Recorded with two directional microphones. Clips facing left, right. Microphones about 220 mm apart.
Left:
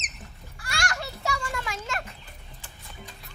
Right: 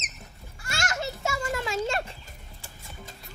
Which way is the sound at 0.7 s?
25° right (ahead or behind).